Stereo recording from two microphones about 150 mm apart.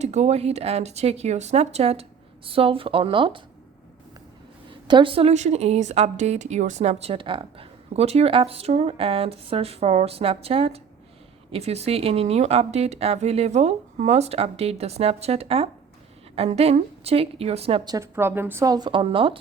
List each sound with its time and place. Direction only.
0.0 s a woman's voice: 50° right (ahead or behind)
4.9 s a woman's voice: 35° right (ahead or behind)
17.9 s speech: 15° right (ahead or behind); by 19.4 s 35° right (ahead or behind)